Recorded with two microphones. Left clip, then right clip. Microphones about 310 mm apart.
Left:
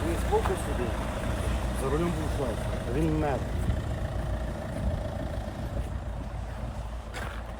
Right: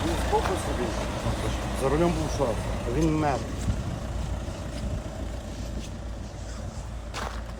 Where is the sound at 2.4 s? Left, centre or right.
Right.